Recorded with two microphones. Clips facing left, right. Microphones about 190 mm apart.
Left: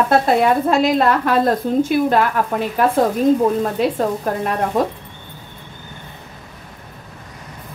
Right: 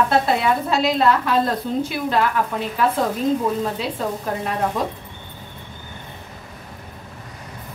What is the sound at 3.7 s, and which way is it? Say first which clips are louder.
Speech: left 7 dB; 50° left (ahead or behind).